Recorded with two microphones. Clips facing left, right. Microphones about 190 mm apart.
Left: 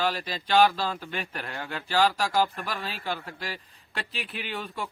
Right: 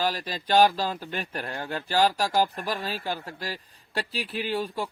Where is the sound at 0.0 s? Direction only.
40° right (ahead or behind).